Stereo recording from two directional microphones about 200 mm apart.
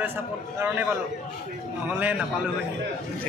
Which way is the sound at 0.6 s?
10° right (ahead or behind).